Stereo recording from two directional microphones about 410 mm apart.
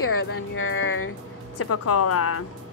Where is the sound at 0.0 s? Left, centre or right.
Left.